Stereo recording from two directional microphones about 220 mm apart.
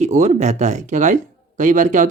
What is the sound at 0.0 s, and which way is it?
Speech, 30° right (ahead or behind).